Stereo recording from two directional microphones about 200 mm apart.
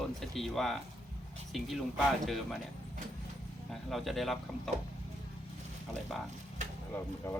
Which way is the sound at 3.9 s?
Centre (ahead or behind).